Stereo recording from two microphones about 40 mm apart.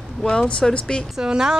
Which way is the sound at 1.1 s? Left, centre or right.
Centre.